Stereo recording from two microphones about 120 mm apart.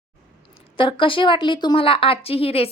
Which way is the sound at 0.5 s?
45° left (ahead or behind).